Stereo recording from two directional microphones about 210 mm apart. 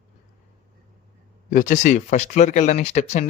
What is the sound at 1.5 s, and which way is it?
Speech, 40° left (ahead or behind).